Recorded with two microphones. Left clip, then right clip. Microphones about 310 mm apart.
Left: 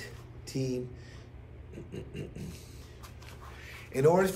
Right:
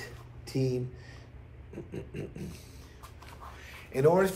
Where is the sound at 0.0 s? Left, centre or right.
Right.